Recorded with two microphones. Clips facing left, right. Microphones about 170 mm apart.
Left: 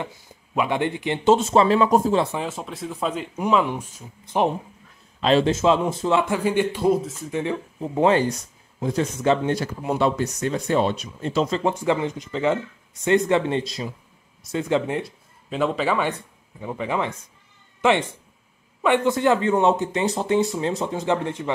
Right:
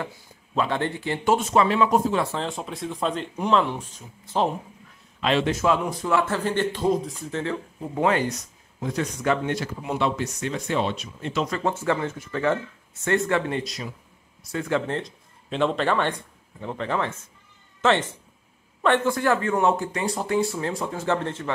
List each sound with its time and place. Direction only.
0.6 s speech: 15° left (ahead or behind); by 2.2 s 35° left (ahead or behind)
2.3 s speech: 5° left (ahead or behind)
5.2 s speech: 30° left (ahead or behind); by 7.3 s 5° left (ahead or behind)
7.9 s speech: 30° left (ahead or behind)
11.4 s speech: 20° left (ahead or behind)